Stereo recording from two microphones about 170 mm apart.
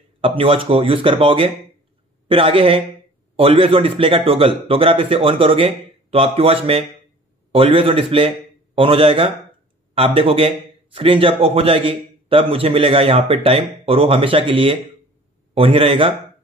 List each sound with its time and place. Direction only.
0.2 s a man's voice: 30° right (ahead or behind)